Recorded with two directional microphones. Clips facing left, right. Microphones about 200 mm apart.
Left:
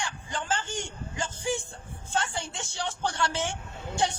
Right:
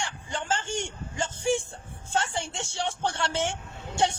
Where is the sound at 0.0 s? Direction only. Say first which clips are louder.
Right 1 dB; 25° right (ahead or behind).